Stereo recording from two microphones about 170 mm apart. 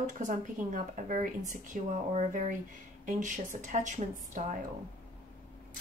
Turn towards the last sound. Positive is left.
turn(degrees=-45)  # may be behind; listen again after turning